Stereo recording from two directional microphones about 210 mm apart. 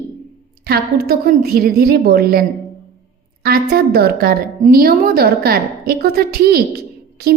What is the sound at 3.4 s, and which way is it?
A woman's voice, 45° right (ahead or behind).